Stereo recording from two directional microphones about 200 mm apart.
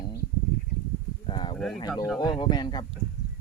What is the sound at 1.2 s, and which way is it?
Speech, 25° left (ahead or behind).